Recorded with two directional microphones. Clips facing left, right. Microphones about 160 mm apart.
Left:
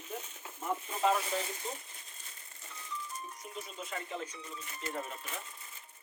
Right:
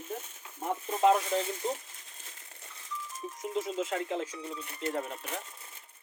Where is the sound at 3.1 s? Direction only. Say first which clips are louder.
Right 8 dB; 90° right; by 5.4 s 65° right (ahead or behind).